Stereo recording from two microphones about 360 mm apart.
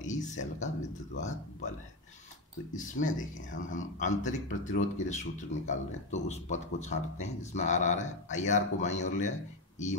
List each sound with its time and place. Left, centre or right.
0.0 s speech: centre
2.7 s speech: left